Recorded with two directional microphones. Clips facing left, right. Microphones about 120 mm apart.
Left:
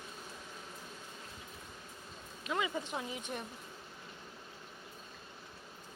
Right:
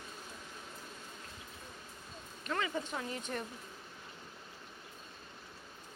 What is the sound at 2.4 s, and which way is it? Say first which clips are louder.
A woman's voice: even; 10° left (ahead or behind).